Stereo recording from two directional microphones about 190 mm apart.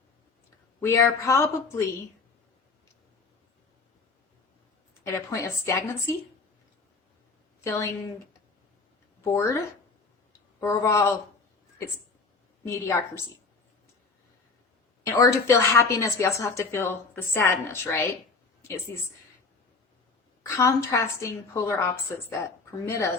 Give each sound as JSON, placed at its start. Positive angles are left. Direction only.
{"t": 0.8, "sound": "a woman's voice", "side_deg": 15}
{"t": 5.0, "sound": "a woman's voice", "side_deg": 15}
{"t": 7.6, "sound": "a woman's voice", "side_deg": 15}
{"t": 9.3, "sound": "a woman's voice", "side_deg": 15}
{"t": 10.6, "sound": "a woman's voice", "side_deg": 15}
{"t": 12.6, "sound": "a woman's voice", "side_deg": 15}
{"t": 15.0, "sound": "a woman's voice", "side_deg": 15}
{"t": 20.5, "sound": "a woman's voice", "side_deg": 15}
{"t": 22.9, "sound": "a woman's voice", "side_deg": 15}